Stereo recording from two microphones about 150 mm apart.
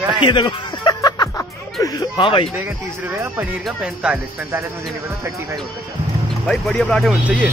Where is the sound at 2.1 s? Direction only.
35° left (ahead or behind).